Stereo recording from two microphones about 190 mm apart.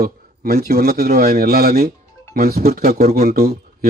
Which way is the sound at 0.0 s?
55° right (ahead or behind).